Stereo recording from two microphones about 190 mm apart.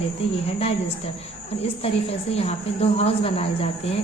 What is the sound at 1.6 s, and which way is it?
A woman's voice, 30° left (ahead or behind).